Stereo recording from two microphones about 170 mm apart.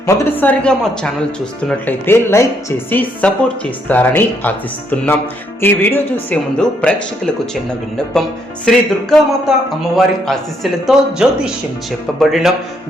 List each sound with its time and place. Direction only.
0.0 s speech: 10° left (ahead or behind)